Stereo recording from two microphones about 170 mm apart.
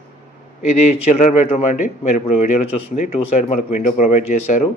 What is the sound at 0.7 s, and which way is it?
A man's voice, 40° left (ahead or behind).